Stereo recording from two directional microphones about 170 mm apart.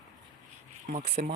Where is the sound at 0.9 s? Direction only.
45° right (ahead or behind).